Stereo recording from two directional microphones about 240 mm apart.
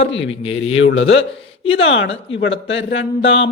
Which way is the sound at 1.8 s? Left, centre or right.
Left.